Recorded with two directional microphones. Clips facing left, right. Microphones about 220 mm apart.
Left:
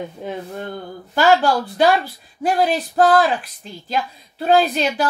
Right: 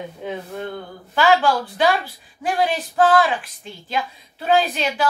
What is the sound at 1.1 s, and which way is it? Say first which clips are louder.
A woman's voice: left 2 dB; 40° left (ahead or behind).